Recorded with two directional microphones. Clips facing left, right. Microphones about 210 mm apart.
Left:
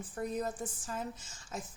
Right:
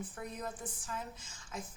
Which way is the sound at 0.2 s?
40° left (ahead or behind).